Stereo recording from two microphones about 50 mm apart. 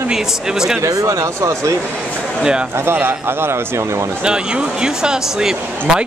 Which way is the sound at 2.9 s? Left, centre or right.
Right.